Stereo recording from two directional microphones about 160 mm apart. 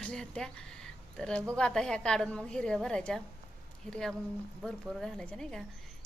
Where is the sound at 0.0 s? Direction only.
5° left (ahead or behind).